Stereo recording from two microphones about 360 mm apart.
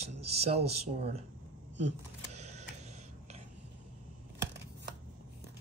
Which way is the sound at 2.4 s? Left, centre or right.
Centre.